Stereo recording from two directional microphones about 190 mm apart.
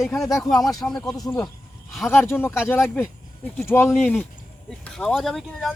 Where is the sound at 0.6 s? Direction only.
20° left (ahead or behind).